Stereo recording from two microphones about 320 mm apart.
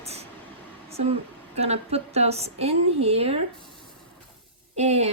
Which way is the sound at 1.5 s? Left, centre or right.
Centre.